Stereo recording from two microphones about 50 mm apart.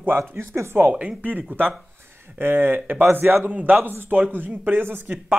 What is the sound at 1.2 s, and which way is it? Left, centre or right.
Speech, right.